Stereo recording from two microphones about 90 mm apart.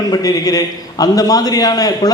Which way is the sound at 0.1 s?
45° left (ahead or behind).